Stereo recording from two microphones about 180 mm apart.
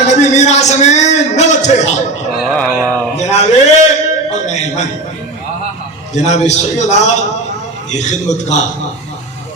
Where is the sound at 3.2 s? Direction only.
40° left (ahead or behind).